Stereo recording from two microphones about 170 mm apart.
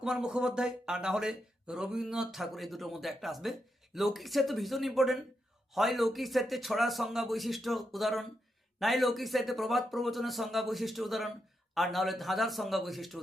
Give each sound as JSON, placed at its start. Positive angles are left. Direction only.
{"t": 0.0, "sound": "speech", "side_deg": -5}